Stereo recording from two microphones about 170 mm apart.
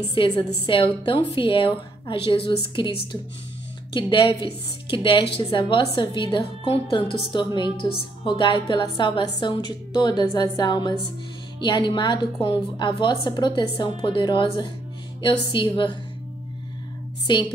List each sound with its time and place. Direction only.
0.1 s a woman's voice: 30° left (ahead or behind)
17.3 s a woman's voice: 30° left (ahead or behind)